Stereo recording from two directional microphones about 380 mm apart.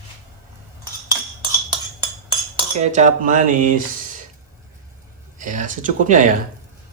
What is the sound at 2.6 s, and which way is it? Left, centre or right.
Cutlery, centre.